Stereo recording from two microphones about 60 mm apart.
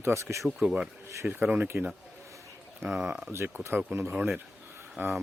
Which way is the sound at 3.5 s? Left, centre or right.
Right.